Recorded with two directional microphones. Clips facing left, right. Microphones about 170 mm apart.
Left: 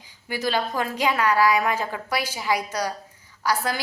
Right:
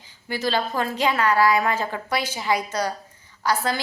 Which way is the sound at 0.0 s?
10° left (ahead or behind).